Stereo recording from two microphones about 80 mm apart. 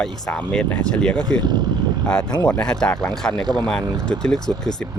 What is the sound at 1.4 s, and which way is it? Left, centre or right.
Speech, right.